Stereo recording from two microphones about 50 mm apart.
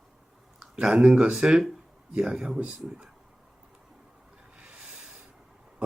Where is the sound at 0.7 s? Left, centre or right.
Centre.